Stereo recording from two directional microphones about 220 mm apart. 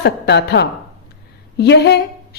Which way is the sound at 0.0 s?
50° left (ahead or behind).